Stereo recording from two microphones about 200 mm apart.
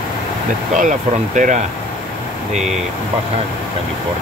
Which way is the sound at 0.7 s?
40° right (ahead or behind).